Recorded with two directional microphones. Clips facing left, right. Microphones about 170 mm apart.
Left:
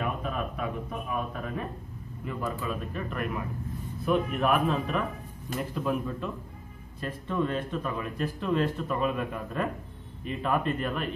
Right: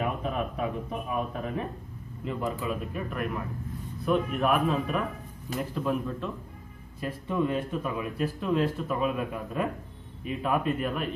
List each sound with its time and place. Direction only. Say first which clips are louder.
0.0 s speech: right 2 dB; 20° right (ahead or behind); by 6.3 s centre (ahead or behind)
7.0 s speech: right 1 dB; 10° right (ahead or behind)